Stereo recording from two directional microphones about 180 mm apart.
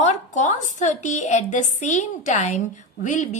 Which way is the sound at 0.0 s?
40° left (ahead or behind).